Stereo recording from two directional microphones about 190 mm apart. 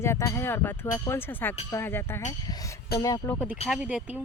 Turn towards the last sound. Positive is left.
turn(degrees=-5)  # may be behind; listen again after turning